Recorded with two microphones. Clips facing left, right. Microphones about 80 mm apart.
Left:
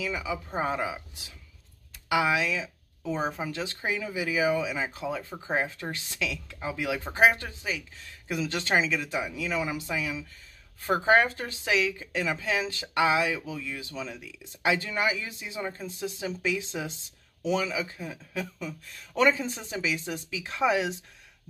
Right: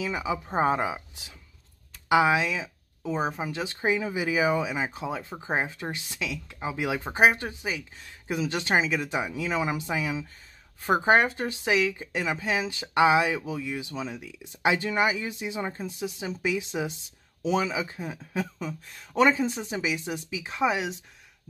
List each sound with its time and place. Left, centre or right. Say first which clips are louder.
0.0 s speech: right 3 dB; right
3.8 s speech: right 5 dB; right; by 20.9 s centre